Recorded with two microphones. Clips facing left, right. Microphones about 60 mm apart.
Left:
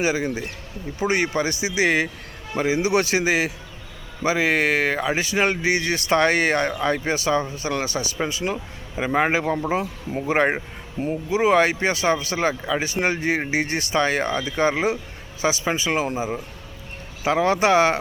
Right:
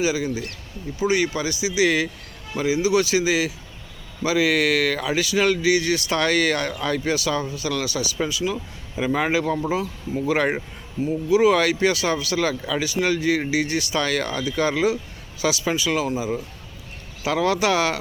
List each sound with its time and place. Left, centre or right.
0.0 s speech: left
11.0 s speech: left